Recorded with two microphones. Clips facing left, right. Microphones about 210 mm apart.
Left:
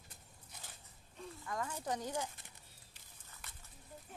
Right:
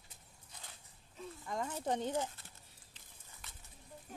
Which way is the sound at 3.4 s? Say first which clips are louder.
Even; centre (ahead or behind).